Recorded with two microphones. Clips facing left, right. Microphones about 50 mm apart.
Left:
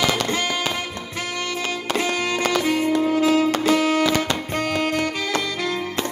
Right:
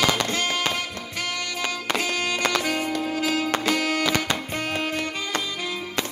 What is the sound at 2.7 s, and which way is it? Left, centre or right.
Music, centre.